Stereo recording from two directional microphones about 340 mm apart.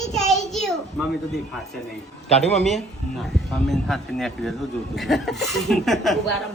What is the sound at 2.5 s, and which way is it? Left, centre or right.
Speech, centre.